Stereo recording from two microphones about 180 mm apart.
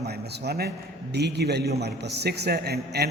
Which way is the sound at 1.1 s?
65° right (ahead or behind).